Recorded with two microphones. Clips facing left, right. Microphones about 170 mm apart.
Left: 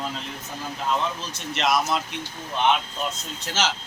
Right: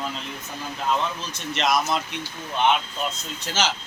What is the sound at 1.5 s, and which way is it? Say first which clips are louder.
Speech: even; centre (ahead or behind).